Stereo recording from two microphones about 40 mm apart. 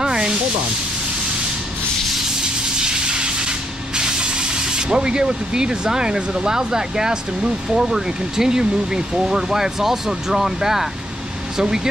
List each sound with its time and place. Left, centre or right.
0.0 s sanding: centre
2.4 s spray: right
11.5 s speech: centre